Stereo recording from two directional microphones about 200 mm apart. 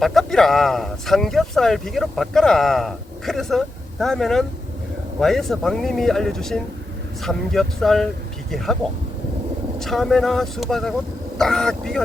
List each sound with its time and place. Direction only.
0.0 s speech: centre (ahead or behind)